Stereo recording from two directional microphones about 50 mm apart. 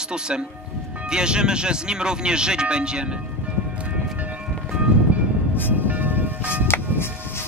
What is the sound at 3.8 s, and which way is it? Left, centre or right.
Music, right.